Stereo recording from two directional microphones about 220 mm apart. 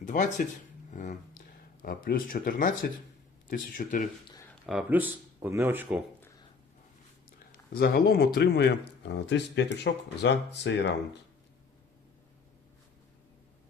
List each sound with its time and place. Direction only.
0.0 s speech: 35° left (ahead or behind)
0.9 s a sound: 35° left (ahead or behind)
1.8 s speech: 40° left (ahead or behind)
4.6 s speech: 5° right (ahead or behind)
7.7 s speech: 45° left (ahead or behind)